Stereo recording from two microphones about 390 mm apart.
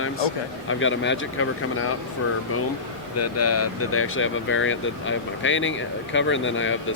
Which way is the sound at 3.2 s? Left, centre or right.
Left.